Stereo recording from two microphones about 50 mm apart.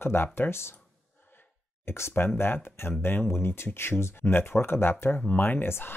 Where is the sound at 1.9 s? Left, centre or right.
Left.